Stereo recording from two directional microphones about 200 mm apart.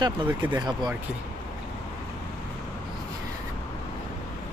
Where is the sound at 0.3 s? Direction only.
10° right (ahead or behind).